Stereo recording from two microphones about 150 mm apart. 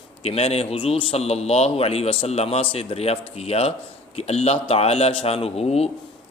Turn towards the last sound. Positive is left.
turn(degrees=45)  # may be behind; listen again after turning